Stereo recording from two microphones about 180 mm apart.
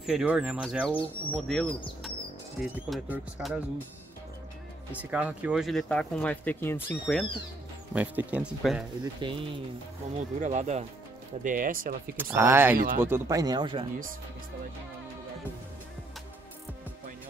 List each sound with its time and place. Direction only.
0.0 s speech: 5° right (ahead or behind)
2.7 s speech: 10° right (ahead or behind)
4.9 s speech: 10° right (ahead or behind); by 7.2 s 5° left (ahead or behind)
7.9 s speech: 10° right (ahead or behind)
9.0 s speech: 25° right (ahead or behind)
10.4 s speech: 40° right (ahead or behind)
11.4 s speech: 50° right (ahead or behind)
12.2 s speech: 10° right (ahead or behind)
12.7 s speech: 50° right (ahead or behind)
13.0 s speech: 15° right (ahead or behind)